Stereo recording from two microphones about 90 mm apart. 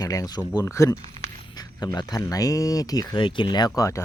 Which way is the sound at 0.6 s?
35° left (ahead or behind).